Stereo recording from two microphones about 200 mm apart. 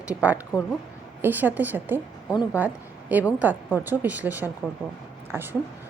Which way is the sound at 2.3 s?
15° left (ahead or behind).